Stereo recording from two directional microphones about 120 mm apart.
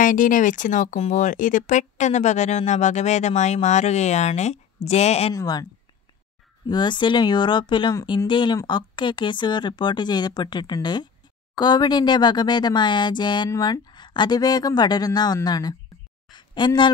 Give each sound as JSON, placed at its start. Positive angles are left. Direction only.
{"t": 0.0, "sound": "speech", "side_deg": 90}
{"t": 5.3, "sound": "speech", "side_deg": 30}
{"t": 6.7, "sound": "speech", "side_deg": 40}
{"t": 16.3, "sound": "a sound", "side_deg": 40}